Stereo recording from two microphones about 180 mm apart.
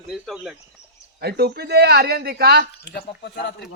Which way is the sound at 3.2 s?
70° left (ahead or behind).